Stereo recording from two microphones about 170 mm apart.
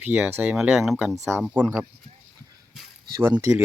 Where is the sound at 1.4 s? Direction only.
5° right (ahead or behind).